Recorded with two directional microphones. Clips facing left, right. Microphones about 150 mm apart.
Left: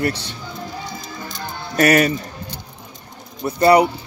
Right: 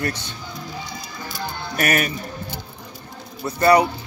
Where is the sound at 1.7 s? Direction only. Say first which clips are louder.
Left 7 dB; 35° left (ahead or behind).